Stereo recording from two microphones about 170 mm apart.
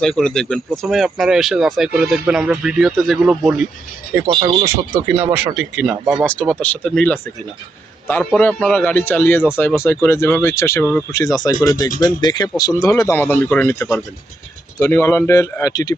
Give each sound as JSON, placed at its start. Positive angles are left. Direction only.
{"t": 0.0, "sound": "speech", "side_deg": 5}
{"t": 4.3, "sound": "speech", "side_deg": -30}
{"t": 4.6, "sound": "speech", "side_deg": -15}
{"t": 6.2, "sound": "speech", "side_deg": 5}
{"t": 8.2, "sound": "speech", "side_deg": 5}